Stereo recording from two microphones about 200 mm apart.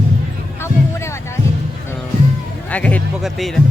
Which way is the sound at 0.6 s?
15° left (ahead or behind).